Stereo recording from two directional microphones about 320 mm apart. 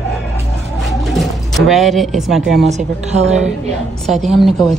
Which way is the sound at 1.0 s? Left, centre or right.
Centre.